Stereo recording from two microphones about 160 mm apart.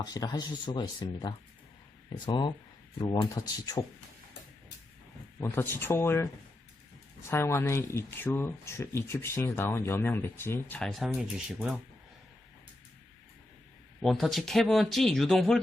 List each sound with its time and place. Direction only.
0.0 s speech: 25° left (ahead or behind)
5.4 s speech: 15° left (ahead or behind)
7.3 s speech: 15° left (ahead or behind)
10.8 s speech: centre (ahead or behind)
14.0 s speech: centre (ahead or behind)